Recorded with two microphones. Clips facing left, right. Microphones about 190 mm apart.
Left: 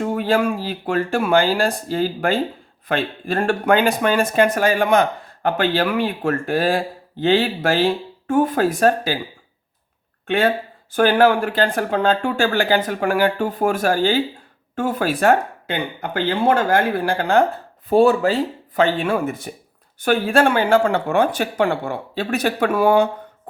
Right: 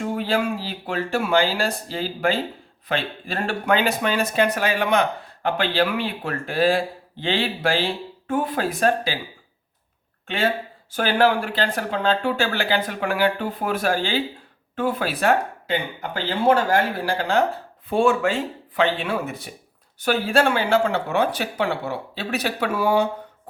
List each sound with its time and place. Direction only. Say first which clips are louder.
0.0 s speech: left 4 dB; 50° left (ahead or behind)
10.2 s speech: left 5 dB; 55° left (ahead or behind)
17.8 s speech: left 5 dB; 35° left (ahead or behind); by 23.0 s 55° left (ahead or behind)